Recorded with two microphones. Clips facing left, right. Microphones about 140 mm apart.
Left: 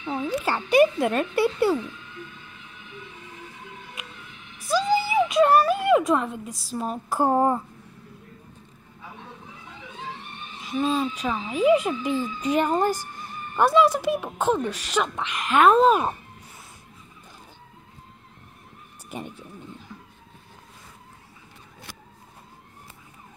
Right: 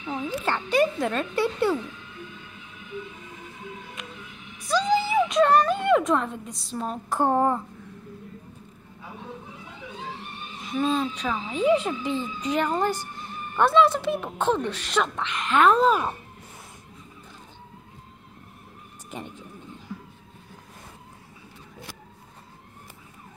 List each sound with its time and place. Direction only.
0.0 s frog: 10° left (ahead or behind)
4.0 s music: 5° left (ahead or behind)
4.6 s speech: 5° left (ahead or behind)
10.6 s a woman's voice: centre (ahead or behind); by 12.9 s 20° left (ahead or behind)
13.6 s speech: 10° left (ahead or behind)
19.0 s vehicle: 15° left (ahead or behind)